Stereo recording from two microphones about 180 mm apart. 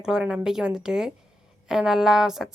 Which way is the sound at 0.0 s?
5° right (ahead or behind).